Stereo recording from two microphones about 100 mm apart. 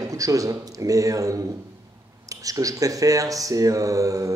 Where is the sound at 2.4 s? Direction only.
35° right (ahead or behind).